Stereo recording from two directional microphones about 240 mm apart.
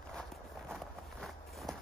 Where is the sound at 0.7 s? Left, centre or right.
Centre.